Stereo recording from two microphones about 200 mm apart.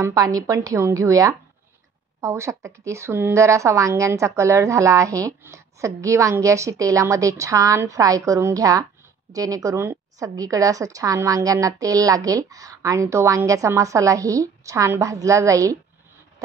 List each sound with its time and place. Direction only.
0.0 s speech: 15° right (ahead or behind)